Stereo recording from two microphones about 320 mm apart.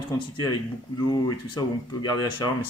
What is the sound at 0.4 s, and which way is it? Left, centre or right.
Speech, centre.